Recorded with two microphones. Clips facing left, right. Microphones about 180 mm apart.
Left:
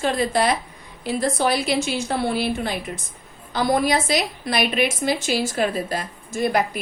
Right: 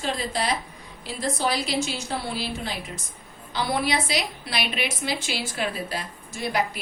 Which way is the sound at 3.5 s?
45° left (ahead or behind).